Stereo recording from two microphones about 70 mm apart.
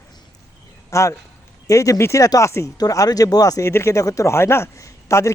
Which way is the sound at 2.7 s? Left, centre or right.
Left.